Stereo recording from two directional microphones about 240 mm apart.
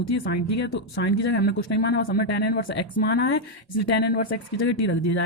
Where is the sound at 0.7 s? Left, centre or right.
Left.